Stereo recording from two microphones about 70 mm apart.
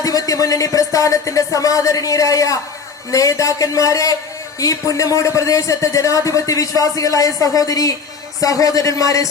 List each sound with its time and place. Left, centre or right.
0.0 s speech: left